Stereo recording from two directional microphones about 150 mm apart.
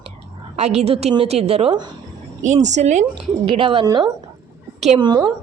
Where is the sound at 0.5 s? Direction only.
45° right (ahead or behind).